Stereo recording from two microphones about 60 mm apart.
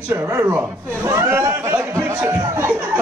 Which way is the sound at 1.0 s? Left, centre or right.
Right.